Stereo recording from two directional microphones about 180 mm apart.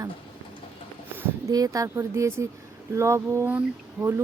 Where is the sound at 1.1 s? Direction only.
20° right (ahead or behind).